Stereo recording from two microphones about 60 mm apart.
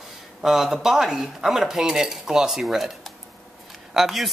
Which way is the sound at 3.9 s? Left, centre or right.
Centre.